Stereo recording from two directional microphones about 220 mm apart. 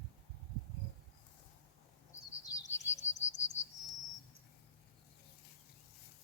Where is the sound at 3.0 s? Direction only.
30° left (ahead or behind).